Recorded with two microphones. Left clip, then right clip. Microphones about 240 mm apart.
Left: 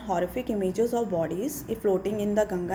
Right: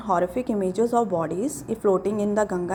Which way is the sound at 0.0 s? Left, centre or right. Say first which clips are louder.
Right 5 dB; right.